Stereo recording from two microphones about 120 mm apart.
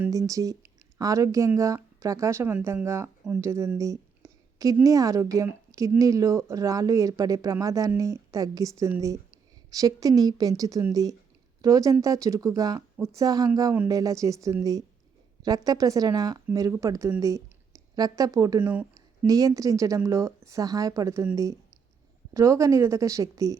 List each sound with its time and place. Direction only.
0.1 s a woman's voice: 25° right (ahead or behind)
18.6 s speech: 15° right (ahead or behind)
19.3 s speech: 30° right (ahead or behind)
22.3 s speech: 25° right (ahead or behind)